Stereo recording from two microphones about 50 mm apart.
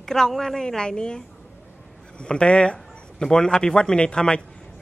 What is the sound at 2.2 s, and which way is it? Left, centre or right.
A woman's voice, centre.